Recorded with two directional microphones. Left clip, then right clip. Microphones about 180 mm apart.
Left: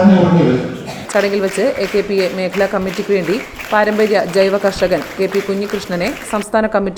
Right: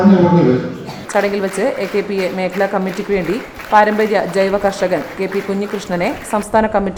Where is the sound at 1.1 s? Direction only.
15° left (ahead or behind).